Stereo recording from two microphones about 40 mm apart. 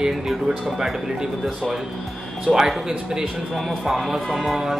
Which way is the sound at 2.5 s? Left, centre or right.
Right.